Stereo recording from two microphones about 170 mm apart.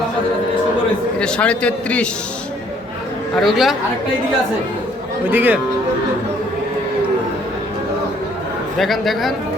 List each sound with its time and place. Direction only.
1.2 s a man's voice: 5° left (ahead or behind)
3.3 s a man's voice: centre (ahead or behind)
5.3 s speech: 10° right (ahead or behind)
8.8 s a man's voice: centre (ahead or behind)